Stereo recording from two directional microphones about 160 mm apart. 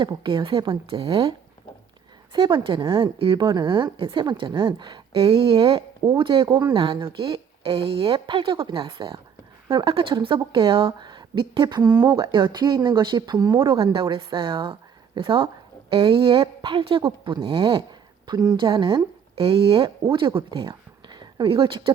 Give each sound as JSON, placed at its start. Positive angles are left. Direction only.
{"t": 0.0, "sound": "a woman's voice", "side_deg": -30}